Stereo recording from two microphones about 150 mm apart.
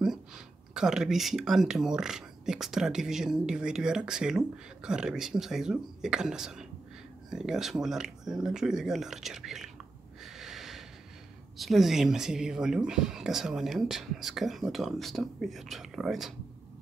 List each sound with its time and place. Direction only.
0.7 s speech: 5° right (ahead or behind)
10.2 s snort: centre (ahead or behind)
11.5 s speech: centre (ahead or behind)